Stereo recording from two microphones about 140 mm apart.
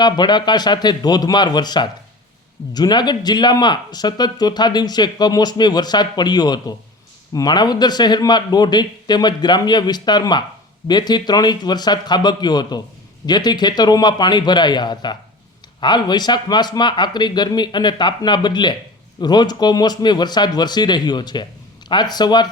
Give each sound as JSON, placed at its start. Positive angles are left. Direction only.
{"t": 0.0, "sound": "speech", "side_deg": 30}